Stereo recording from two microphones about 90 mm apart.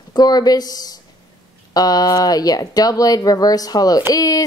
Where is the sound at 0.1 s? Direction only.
50° left (ahead or behind).